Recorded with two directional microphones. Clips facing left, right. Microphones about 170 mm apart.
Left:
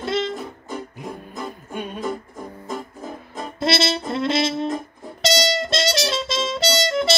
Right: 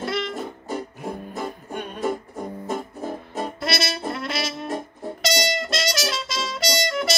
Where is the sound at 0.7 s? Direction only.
35° right (ahead or behind).